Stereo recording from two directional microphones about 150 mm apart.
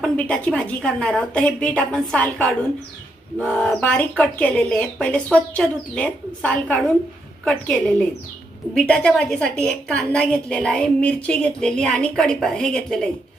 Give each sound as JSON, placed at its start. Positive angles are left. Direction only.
{"t": 0.0, "sound": "a woman's voice", "side_deg": 5}